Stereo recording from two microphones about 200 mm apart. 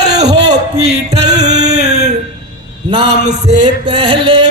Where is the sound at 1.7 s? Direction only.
35° right (ahead or behind).